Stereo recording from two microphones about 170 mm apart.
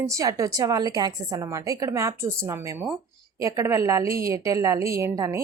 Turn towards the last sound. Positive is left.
turn(degrees=-20)  # may be behind; listen again after turning